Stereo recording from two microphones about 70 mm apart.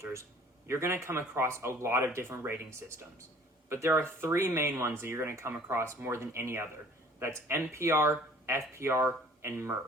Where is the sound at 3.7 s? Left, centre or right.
Right.